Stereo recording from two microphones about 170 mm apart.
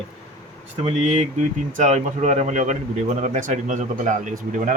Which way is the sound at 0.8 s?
40° right (ahead or behind).